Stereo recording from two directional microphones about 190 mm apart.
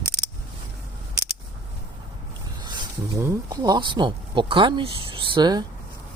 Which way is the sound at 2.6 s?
20° right (ahead or behind).